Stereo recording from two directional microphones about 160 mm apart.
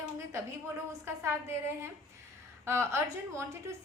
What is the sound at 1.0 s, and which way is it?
A woman's voice, 15° right (ahead or behind).